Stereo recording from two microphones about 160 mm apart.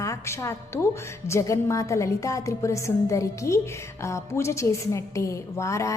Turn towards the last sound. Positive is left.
turn(degrees=20)  # may be behind; listen again after turning